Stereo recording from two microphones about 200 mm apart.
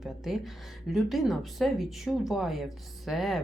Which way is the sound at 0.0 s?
Centre (ahead or behind).